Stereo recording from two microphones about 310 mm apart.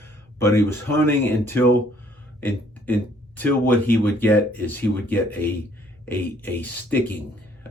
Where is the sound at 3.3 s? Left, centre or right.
Centre.